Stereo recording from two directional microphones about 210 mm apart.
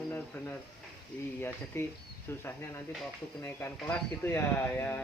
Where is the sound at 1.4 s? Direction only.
10° left (ahead or behind).